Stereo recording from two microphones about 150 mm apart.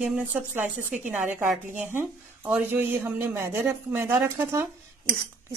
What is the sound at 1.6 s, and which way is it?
A woman's voice, 15° right (ahead or behind).